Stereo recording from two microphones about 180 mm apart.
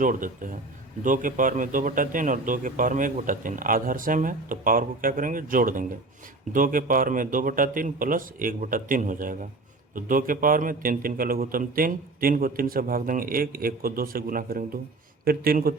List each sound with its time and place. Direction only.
0.0 s speech: 50° right (ahead or behind)